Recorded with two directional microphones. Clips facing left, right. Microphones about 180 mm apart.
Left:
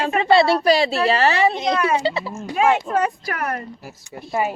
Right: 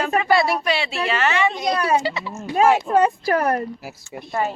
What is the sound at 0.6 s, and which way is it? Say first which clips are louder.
Speech: left 6 dB; 40° left (ahead or behind).